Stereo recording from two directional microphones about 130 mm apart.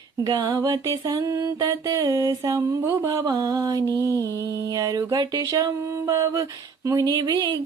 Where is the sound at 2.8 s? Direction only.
20° right (ahead or behind).